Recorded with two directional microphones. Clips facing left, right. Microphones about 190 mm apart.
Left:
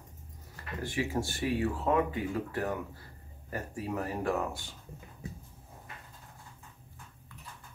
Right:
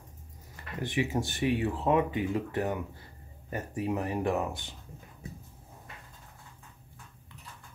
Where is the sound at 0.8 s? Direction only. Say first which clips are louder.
Right 2 dB; 20° right (ahead or behind).